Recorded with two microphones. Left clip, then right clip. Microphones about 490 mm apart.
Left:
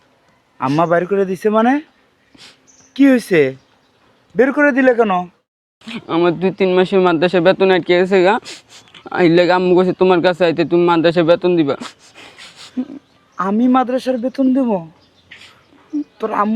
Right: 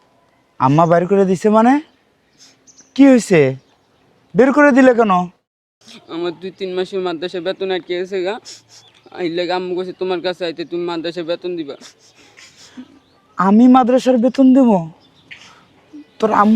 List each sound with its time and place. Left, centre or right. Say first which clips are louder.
0.6 s a man's voice: right 2 dB; right
2.9 s speech: right 2 dB; right
5.8 s speech: left 8 dB; left
13.3 s speech: right 4 dB; right
16.1 s speech: right 5 dB; right